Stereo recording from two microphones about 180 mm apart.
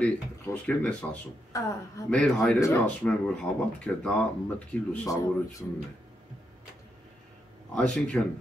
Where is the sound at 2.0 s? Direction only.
5° left (ahead or behind).